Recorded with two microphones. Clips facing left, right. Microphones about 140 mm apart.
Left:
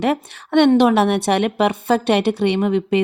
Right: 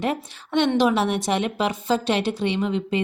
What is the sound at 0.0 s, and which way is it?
A woman's voice, 65° left (ahead or behind).